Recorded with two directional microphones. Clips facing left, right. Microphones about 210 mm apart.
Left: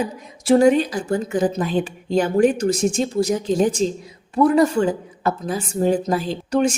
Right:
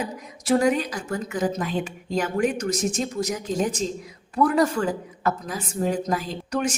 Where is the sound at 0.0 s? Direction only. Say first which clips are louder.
Left 5 dB; 30° left (ahead or behind).